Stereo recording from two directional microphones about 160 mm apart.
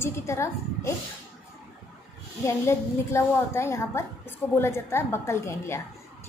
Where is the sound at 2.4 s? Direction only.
15° left (ahead or behind).